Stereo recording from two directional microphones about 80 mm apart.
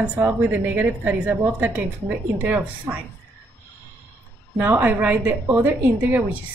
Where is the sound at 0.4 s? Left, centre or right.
Right.